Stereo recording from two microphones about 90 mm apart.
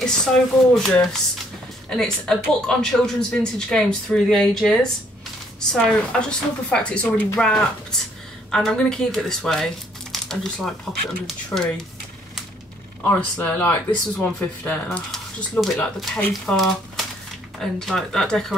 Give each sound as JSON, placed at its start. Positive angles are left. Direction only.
{"t": 0.0, "sound": "speech", "side_deg": 5}
{"t": 13.1, "sound": "speech", "side_deg": 20}
{"t": 15.0, "sound": "speech", "side_deg": 5}